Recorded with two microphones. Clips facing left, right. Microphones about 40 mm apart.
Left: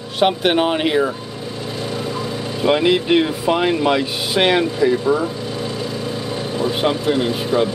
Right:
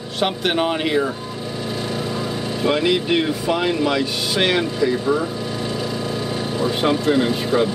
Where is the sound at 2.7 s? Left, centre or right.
Centre.